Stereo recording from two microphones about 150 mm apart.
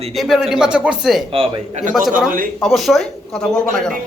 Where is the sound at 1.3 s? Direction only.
40° right (ahead or behind).